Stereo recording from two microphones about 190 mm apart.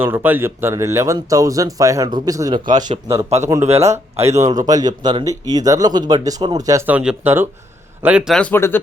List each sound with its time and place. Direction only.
0.0 s speech: 10° right (ahead or behind)
3.2 s speech: 30° right (ahead or behind)
3.8 s a man's voice: 15° right (ahead or behind); by 8.8 s 10° left (ahead or behind)